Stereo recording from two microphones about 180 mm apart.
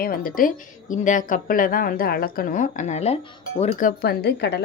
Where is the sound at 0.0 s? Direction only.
55° left (ahead or behind); by 3.8 s 35° left (ahead or behind).